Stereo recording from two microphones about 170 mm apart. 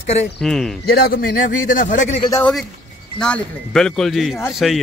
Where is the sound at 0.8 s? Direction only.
65° left (ahead or behind).